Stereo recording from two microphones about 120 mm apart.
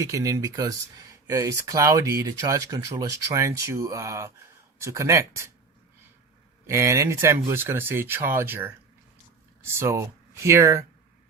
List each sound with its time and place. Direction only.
0.0 s speech: 25° right (ahead or behind)
6.7 s speech: 25° right (ahead or behind)